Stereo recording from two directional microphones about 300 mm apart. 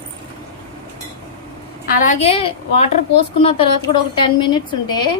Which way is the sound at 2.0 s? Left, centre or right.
Left.